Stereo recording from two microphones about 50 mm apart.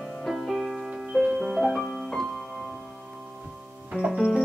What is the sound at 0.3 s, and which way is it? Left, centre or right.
Music, centre.